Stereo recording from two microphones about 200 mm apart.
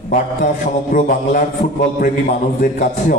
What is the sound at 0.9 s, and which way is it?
A man's voice, 40° left (ahead or behind).